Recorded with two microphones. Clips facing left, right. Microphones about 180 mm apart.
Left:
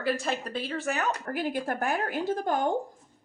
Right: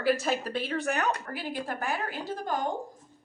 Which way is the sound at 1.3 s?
50° left (ahead or behind).